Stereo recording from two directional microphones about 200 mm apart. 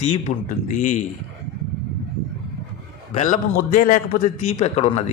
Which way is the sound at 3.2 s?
40° left (ahead or behind).